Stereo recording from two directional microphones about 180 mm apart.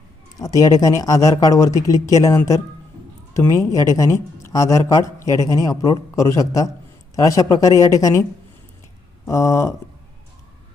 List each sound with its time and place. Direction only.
0.3 s speech: 20° left (ahead or behind)
9.2 s speech: 15° left (ahead or behind)